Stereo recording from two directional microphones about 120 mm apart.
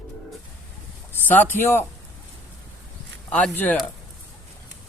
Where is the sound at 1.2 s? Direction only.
15° left (ahead or behind).